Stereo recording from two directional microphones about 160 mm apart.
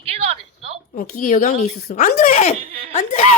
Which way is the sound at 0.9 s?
55° left (ahead or behind).